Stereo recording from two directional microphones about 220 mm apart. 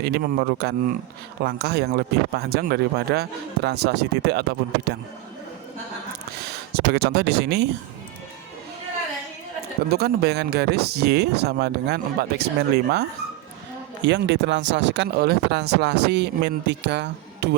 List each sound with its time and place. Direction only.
0.0 s speech: 45° right (ahead or behind)
6.4 s speech: 45° right (ahead or behind)
9.9 s speech: 45° right (ahead or behind)